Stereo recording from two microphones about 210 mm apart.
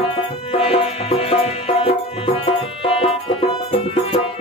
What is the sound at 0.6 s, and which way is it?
Music, 30° left (ahead or behind).